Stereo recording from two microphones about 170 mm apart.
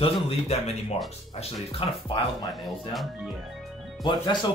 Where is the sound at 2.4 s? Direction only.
Centre (ahead or behind).